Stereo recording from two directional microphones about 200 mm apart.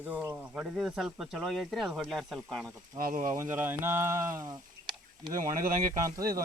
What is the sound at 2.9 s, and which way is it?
Speech, 45° right (ahead or behind).